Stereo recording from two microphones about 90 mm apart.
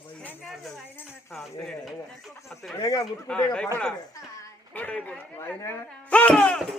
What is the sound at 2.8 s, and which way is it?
Speech, 40° left (ahead or behind).